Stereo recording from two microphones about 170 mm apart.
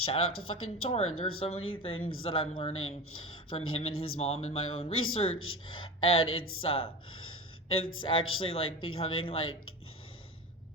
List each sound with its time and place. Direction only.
0.0 s speech: 35° left (ahead or behind)
6.6 s speech: 35° left (ahead or behind)